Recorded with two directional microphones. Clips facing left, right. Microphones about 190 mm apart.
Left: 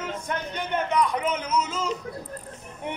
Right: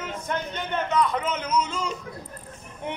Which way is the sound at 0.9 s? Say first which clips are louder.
Right 1 dB; 10° left (ahead or behind).